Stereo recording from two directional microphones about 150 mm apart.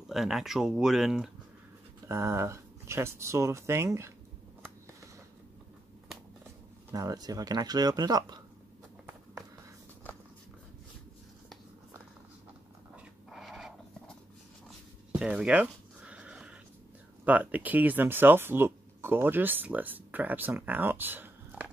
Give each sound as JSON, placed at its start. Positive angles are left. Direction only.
{"t": 0.1, "sound": "speech", "side_deg": 0}
{"t": 2.0, "sound": "speech", "side_deg": -20}
{"t": 6.9, "sound": "speech", "side_deg": -25}
{"t": 12.9, "sound": "dog", "side_deg": 0}
{"t": 15.1, "sound": "a sound", "side_deg": -5}
{"t": 17.2, "sound": "speech", "side_deg": -10}